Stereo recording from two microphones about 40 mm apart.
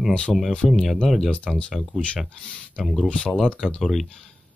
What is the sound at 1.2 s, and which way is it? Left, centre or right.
Speech, left.